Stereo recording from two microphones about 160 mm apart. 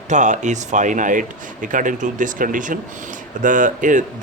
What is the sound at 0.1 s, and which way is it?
Speech, 50° right (ahead or behind).